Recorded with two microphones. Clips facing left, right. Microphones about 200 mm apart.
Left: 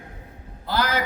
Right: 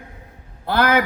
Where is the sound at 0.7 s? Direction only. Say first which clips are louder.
Right 7 dB; 60° right (ahead or behind).